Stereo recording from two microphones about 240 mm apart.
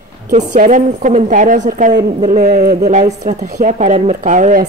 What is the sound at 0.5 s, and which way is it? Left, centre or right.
A woman's voice, right.